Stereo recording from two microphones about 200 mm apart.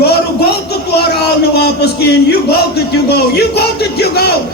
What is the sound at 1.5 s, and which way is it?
Speech, 55° left (ahead or behind).